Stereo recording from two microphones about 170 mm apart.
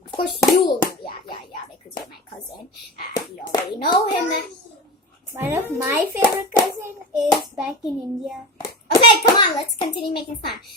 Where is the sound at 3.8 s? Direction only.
65° left (ahead or behind).